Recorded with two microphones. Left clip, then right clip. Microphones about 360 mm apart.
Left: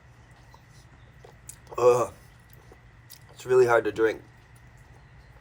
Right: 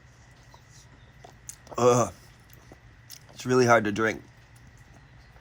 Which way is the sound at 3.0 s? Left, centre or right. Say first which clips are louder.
Left 2 dB; right.